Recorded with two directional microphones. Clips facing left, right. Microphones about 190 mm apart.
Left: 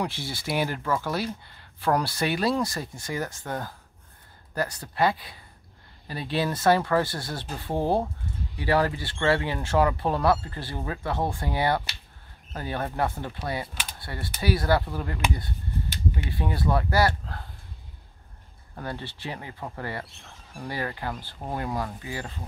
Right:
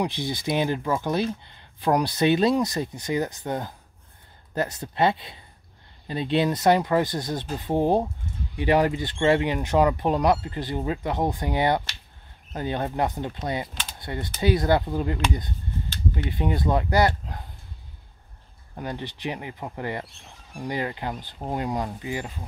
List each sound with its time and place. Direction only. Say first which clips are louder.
0.0 s speech: right 4 dB; 20° right (ahead or behind)
16.2 s speech: right 7 dB; 20° right (ahead or behind)
18.8 s speech: right 3 dB; 15° right (ahead or behind)